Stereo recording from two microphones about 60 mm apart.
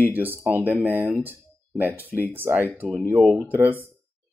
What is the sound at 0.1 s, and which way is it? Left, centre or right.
Speech, right.